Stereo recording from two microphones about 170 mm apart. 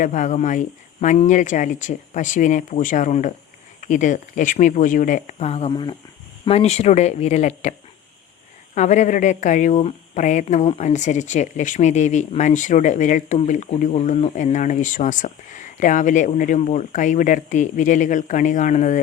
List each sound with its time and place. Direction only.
0.0 s speech: 45° left (ahead or behind)